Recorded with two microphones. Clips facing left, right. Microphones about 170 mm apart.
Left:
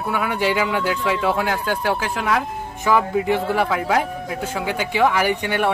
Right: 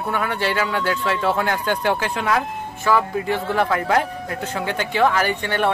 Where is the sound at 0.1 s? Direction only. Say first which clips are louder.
Left 2 dB; 10° left (ahead or behind).